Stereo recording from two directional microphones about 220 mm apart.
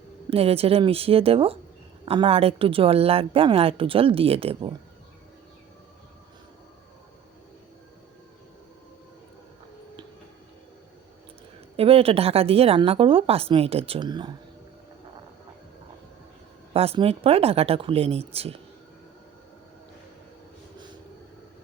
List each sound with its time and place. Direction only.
0.3 s a woman's voice: 25° right (ahead or behind)
11.8 s a woman's voice: 25° right (ahead or behind)
16.7 s a woman's voice: 25° right (ahead or behind)